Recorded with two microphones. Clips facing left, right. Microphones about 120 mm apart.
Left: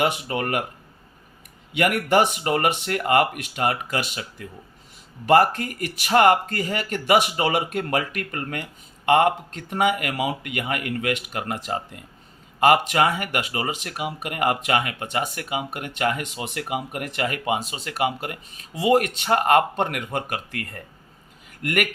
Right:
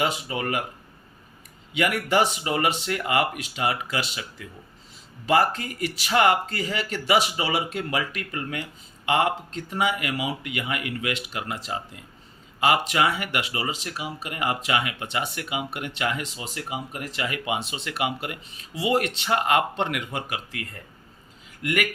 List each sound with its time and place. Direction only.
0.0 s speech: 55° left (ahead or behind)
1.7 s speech: 55° left (ahead or behind)